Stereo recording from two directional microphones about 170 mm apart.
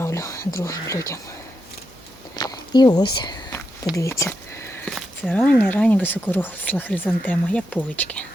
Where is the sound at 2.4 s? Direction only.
25° left (ahead or behind).